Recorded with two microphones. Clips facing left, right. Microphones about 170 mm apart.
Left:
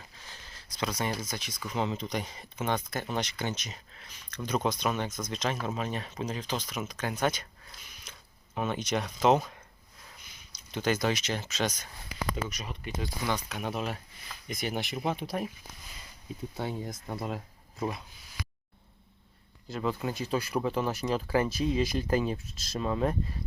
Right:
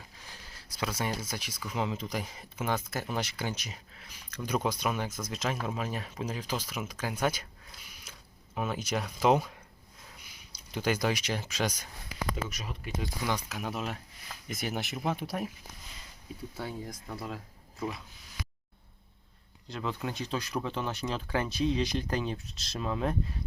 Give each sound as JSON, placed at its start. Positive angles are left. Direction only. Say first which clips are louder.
{"t": 0.3, "sound": "speech", "louder": "even", "side_deg": -10}
{"t": 8.5, "sound": "speech", "louder": "left 2 dB", "side_deg": -5}
{"t": 16.6, "sound": "speech", "louder": "left 4 dB", "side_deg": 20}
{"t": 19.6, "sound": "speech", "louder": "left 3 dB", "side_deg": 5}